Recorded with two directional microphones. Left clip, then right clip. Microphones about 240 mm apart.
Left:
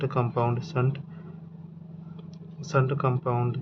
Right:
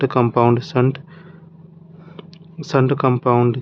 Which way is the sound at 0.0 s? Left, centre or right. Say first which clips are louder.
Right 12 dB; right.